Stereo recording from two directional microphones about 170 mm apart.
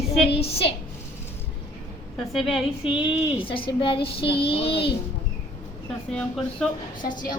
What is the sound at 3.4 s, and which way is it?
A woman's voice, 30° left (ahead or behind).